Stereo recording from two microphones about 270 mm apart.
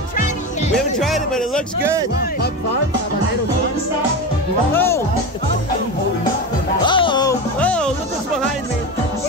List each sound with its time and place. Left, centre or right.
0.7 s speech: centre
1.8 s speech: centre
4.7 s speech: centre
6.8 s music: centre
7.6 s music: centre